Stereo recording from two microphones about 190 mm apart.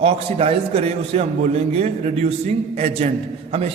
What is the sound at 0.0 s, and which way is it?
A man's voice, 30° right (ahead or behind).